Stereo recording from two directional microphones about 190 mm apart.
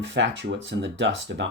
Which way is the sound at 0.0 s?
75° right (ahead or behind).